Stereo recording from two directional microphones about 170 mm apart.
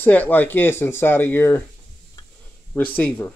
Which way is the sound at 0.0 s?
10° left (ahead or behind).